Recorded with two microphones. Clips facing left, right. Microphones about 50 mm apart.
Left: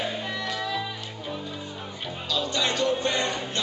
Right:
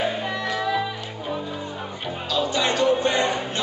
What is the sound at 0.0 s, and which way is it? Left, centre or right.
Music, centre.